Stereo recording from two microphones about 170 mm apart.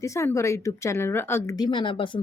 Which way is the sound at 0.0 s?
15° left (ahead or behind).